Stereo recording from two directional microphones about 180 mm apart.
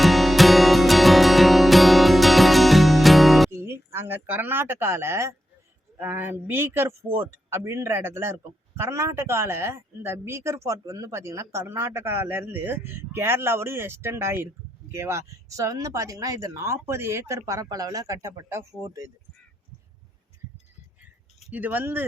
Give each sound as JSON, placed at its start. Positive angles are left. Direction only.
{"t": 0.0, "sound": "music", "side_deg": 0}
{"t": 3.6, "sound": "speech", "side_deg": -15}
{"t": 21.4, "sound": "speech", "side_deg": -10}